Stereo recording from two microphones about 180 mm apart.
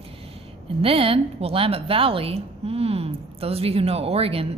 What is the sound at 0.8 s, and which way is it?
A woman's voice, 30° right (ahead or behind).